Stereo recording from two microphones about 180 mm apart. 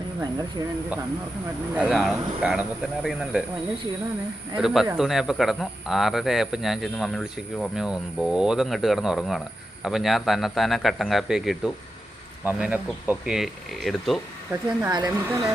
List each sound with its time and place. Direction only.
1.7 s speech: 5° right (ahead or behind)
4.5 s speech: centre (ahead or behind)
14.5 s a woman's voice: 15° right (ahead or behind)